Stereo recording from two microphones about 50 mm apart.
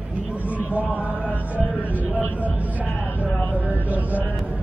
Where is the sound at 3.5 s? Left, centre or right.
Right.